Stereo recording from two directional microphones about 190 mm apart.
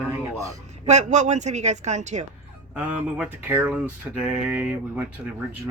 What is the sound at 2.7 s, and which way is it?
Mantra, 5° right (ahead or behind).